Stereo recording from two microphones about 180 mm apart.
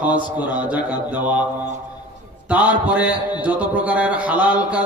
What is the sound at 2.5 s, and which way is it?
Speech, 10° right (ahead or behind).